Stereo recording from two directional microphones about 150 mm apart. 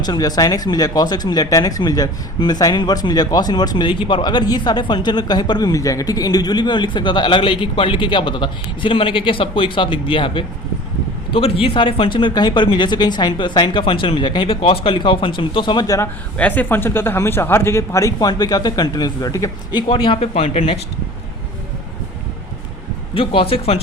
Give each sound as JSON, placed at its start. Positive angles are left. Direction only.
{"t": 0.0, "sound": "speech", "side_deg": 25}
{"t": 16.4, "sound": "speech", "side_deg": 10}
{"t": 19.9, "sound": "speech", "side_deg": 35}
{"t": 23.1, "sound": "speech", "side_deg": 35}